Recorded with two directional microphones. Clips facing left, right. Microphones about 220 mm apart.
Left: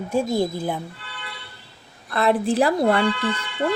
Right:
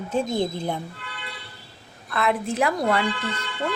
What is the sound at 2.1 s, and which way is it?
Speech, 35° left (ahead or behind).